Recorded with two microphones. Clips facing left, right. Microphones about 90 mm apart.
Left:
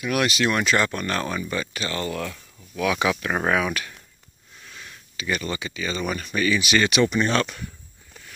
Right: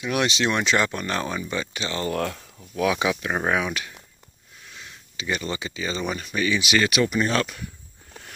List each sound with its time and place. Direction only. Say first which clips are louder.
0.0 s speech: left 1 dB; 25° right (ahead or behind)
2.0 s speech: right 3 dB; 50° right (ahead or behind)
2.8 s speech: even; 20° right (ahead or behind)
6.1 s speech: left 4 dB; 15° right (ahead or behind)
6.8 s speech: left 2 dB; 5° right (ahead or behind)